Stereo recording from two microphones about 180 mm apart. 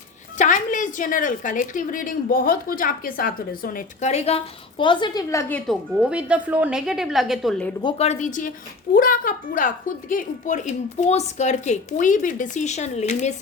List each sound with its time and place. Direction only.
0.3 s a woman's voice: 45° left (ahead or behind)
4.1 s a woman's voice: 35° left (ahead or behind); by 5.7 s 10° left (ahead or behind)
6.0 s a woman's voice: 5° right (ahead or behind)
7.8 s a woman's voice: 30° left (ahead or behind)